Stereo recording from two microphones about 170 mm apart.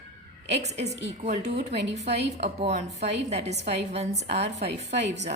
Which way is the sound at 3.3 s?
40° right (ahead or behind).